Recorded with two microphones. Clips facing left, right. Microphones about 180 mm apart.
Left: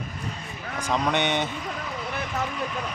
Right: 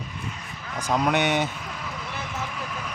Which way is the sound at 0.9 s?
5° right (ahead or behind).